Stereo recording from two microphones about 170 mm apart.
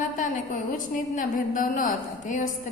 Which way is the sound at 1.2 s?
50° left (ahead or behind).